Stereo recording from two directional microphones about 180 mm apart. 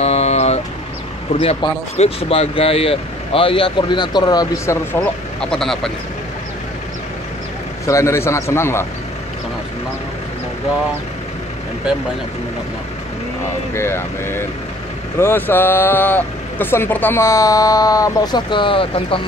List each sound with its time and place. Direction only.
0.0 s vehicle: 35° left (ahead or behind)
1.3 s speech: 35° left (ahead or behind)
5.4 s speech: 5° left (ahead or behind)
7.8 s speech: 15° left (ahead or behind)
13.7 s speech: 15° left (ahead or behind); by 19.2 s 30° left (ahead or behind)